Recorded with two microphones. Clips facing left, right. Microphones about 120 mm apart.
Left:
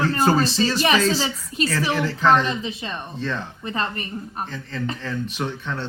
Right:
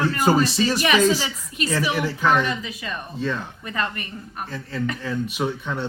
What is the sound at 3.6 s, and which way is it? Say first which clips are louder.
Speech: left 2 dB; 30° left (ahead or behind).